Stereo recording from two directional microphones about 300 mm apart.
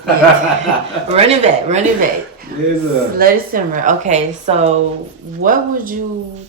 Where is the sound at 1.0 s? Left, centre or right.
Right.